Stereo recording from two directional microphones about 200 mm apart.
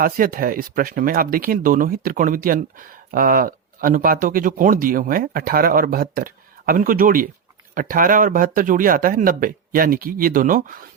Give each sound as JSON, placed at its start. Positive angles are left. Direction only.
{"t": 0.0, "sound": "speech", "side_deg": -45}